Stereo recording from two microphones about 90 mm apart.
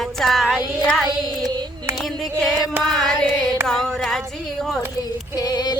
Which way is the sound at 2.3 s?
5° left (ahead or behind).